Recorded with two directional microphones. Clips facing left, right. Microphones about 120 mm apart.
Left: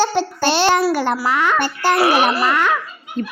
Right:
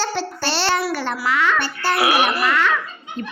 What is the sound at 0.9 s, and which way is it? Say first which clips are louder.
A child's voice: left 3 dB; 40° left (ahead or behind).